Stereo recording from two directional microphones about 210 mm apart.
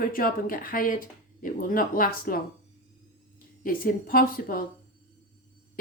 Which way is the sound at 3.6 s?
45° left (ahead or behind).